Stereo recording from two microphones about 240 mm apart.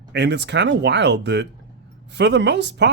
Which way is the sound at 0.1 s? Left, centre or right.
Right.